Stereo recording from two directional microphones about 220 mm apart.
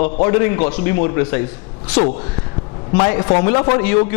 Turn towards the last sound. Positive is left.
turn(degrees=15)  # may be behind; listen again after turning